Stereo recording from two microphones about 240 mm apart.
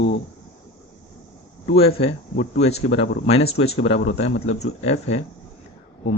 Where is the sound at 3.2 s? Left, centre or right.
Left.